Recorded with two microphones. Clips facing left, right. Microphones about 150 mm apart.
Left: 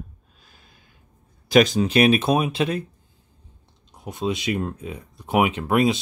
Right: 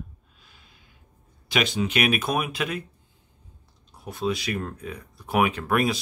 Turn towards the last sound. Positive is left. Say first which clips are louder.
# left 4 dB
turn(degrees=20)  # may be behind; listen again after turning